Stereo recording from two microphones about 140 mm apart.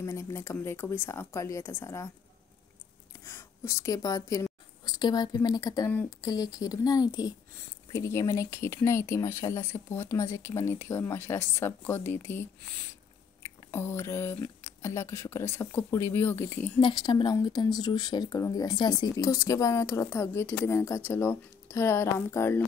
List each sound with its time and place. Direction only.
0.0 s speech: 20° left (ahead or behind)
3.3 s a woman's voice: 20° left (ahead or behind)
5.9 s speech: 15° left (ahead or behind)
6.2 s speech: 25° left (ahead or behind)
13.4 s a sound: 15° left (ahead or behind)
14.4 s speech: 20° left (ahead or behind)
16.8 s speech: 30° left (ahead or behind)